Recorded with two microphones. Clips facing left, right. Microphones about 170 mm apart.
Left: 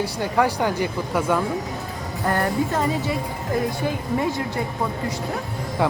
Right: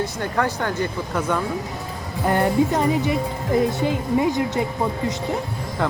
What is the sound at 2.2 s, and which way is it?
Speech, 20° right (ahead or behind).